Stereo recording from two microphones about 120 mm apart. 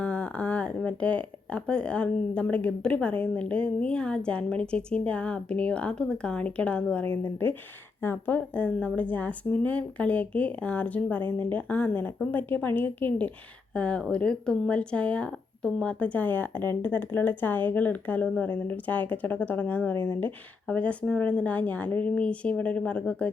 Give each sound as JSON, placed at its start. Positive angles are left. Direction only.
{"t": 0.0, "sound": "speech", "side_deg": 10}